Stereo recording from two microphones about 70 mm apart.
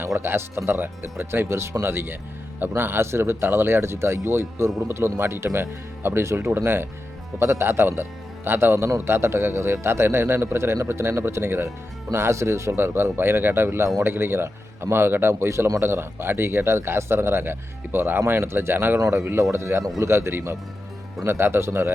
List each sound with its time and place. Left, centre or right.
0.2 s speech: right